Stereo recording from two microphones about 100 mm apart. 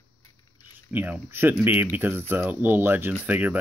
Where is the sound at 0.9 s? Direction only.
20° right (ahead or behind).